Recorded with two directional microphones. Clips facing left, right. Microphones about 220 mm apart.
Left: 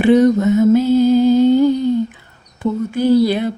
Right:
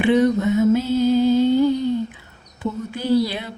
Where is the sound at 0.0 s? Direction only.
40° left (ahead or behind).